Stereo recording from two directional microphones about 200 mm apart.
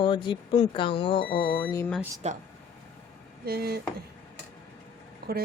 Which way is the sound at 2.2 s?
35° right (ahead or behind).